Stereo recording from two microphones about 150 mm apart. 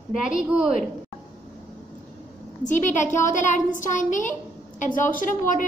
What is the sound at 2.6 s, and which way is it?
A woman's voice, 55° left (ahead or behind).